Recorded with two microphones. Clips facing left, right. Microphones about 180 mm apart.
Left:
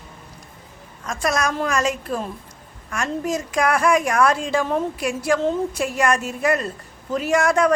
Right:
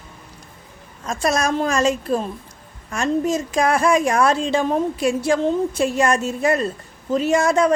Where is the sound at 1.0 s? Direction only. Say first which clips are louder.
Right 2 dB; 25° right (ahead or behind).